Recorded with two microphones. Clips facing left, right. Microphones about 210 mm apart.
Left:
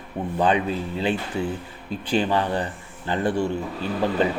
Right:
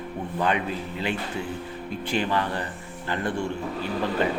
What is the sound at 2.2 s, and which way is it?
Speech, 20° left (ahead or behind).